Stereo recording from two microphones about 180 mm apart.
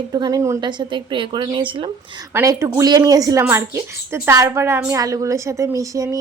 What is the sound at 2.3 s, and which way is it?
A woman's voice, 15° right (ahead or behind).